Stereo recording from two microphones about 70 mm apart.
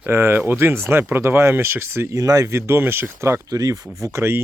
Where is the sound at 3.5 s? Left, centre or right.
Right.